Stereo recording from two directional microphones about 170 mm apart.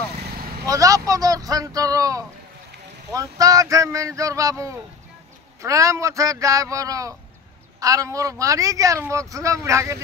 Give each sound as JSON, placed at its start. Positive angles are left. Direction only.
{"t": 0.7, "sound": "a man's voice", "side_deg": -20}